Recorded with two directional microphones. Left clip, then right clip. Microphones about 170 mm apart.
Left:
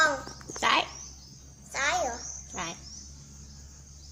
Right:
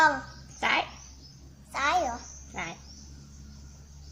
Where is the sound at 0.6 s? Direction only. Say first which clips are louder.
Left 2 dB; 20° left (ahead or behind).